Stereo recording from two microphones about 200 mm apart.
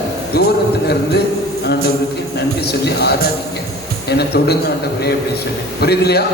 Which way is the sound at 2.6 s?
55° left (ahead or behind).